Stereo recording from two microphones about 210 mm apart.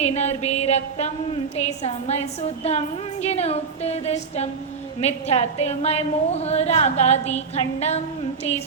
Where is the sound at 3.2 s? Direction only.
30° left (ahead or behind).